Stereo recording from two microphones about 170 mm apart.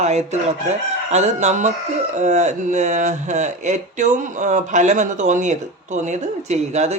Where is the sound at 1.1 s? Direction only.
40° right (ahead or behind).